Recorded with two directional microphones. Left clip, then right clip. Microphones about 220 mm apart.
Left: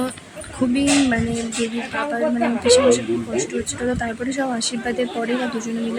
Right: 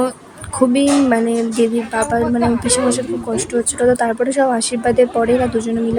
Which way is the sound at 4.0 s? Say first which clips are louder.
Right 9 dB; 15° right (ahead or behind).